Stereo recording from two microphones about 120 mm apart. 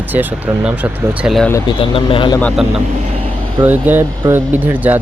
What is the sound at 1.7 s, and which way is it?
Speech, 45° left (ahead or behind).